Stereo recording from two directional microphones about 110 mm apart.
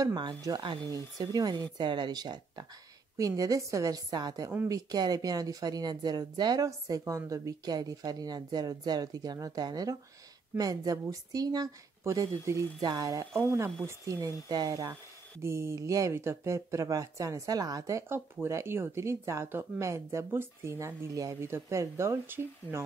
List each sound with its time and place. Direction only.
0.0 s speech: 45° right (ahead or behind)
15.4 s speech: 25° right (ahead or behind)